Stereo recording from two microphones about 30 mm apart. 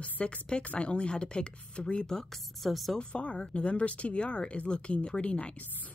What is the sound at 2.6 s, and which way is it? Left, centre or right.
Speech, centre.